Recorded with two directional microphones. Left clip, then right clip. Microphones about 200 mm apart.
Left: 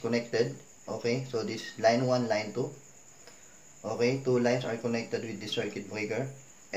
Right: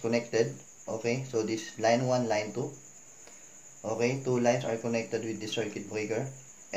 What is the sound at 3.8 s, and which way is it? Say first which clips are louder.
Speech: left 1 dB; 20° right (ahead or behind).